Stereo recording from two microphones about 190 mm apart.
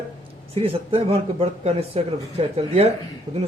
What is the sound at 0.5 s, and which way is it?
Speech, 30° right (ahead or behind).